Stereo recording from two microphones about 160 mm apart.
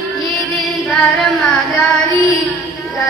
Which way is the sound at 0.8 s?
Centre (ahead or behind).